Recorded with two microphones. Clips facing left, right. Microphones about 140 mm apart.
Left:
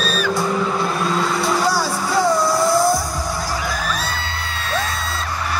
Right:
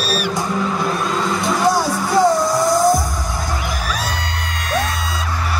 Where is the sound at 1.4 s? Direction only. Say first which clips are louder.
Right 2 dB; 20° right (ahead or behind).